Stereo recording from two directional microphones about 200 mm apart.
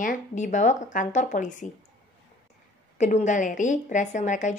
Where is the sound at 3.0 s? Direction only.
35° left (ahead or behind).